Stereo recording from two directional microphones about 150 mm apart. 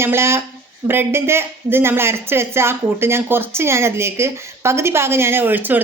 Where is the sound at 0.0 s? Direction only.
15° right (ahead or behind).